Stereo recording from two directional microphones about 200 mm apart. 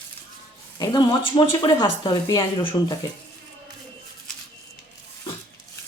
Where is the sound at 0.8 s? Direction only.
20° left (ahead or behind).